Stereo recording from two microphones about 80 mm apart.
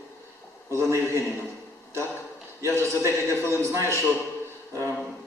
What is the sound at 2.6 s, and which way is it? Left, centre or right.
A man's voice, right.